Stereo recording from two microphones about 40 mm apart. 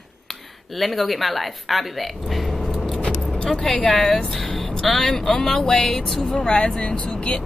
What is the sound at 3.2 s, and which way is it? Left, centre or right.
Vehicle, left.